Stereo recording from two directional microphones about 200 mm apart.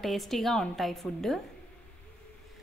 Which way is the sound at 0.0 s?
Centre (ahead or behind).